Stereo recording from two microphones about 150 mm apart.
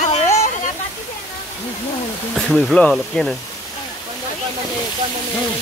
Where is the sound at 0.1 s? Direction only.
45° left (ahead or behind).